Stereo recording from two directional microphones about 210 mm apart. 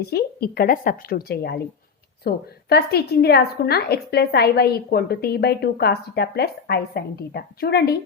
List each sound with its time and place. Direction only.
0.0 s a woman's voice: 50° left (ahead or behind)